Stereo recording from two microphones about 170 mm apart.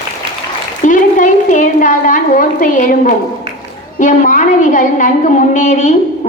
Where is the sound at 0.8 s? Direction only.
50° left (ahead or behind).